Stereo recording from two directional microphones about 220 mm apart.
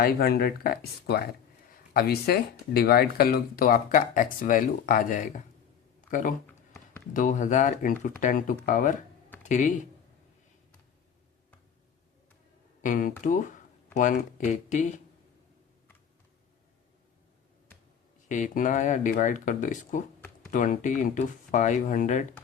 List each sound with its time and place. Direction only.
0.0 s speech: 45° left (ahead or behind)
6.0 s a sound: 35° left (ahead or behind)
7.1 s speech: 35° left (ahead or behind)
12.8 s speech: 35° left (ahead or behind)
18.3 s speech: 35° left (ahead or behind)